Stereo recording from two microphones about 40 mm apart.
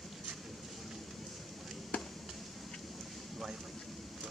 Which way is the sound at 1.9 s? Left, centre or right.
Left.